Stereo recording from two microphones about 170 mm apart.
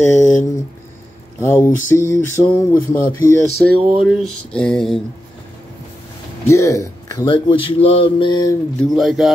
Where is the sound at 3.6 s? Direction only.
5° left (ahead or behind).